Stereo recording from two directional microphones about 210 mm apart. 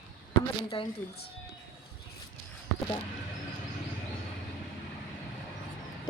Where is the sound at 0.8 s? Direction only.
25° left (ahead or behind).